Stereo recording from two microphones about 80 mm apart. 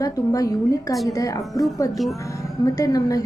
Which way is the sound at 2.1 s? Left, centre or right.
Left.